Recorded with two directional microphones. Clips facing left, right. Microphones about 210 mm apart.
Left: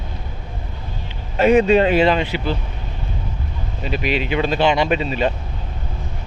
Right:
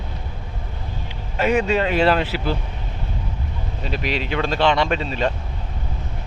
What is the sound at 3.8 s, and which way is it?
Speech, 5° left (ahead or behind).